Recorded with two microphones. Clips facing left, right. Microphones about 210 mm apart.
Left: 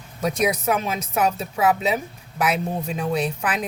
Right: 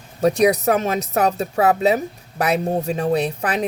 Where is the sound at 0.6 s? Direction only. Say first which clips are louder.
Right 5 dB; 40° right (ahead or behind).